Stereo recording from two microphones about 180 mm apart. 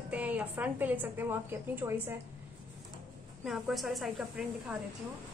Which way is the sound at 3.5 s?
Centre (ahead or behind).